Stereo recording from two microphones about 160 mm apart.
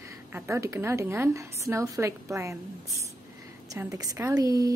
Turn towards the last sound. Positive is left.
turn(degrees=-20)  # may be behind; listen again after turning